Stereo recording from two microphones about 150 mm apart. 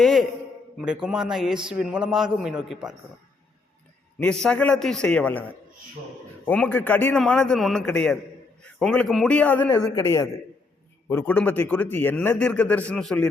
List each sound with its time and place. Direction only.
0.0 s a sound: centre (ahead or behind)
1.0 s a woman's voice: 5° right (ahead or behind)
4.2 s a man's voice: 5° left (ahead or behind)
9.7 s a woman's voice: 25° left (ahead or behind); by 13.2 s 5° left (ahead or behind)